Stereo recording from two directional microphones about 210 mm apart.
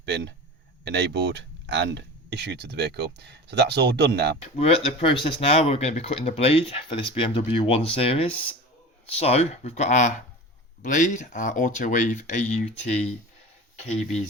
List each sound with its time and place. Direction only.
0.0 s speech: 55° right (ahead or behind)
4.5 s speech: 30° left (ahead or behind)